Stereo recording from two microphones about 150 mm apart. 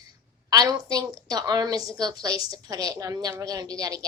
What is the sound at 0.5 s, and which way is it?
A woman's voice, 25° right (ahead or behind).